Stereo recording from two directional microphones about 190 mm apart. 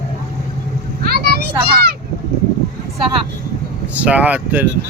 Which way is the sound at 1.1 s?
55° right (ahead or behind).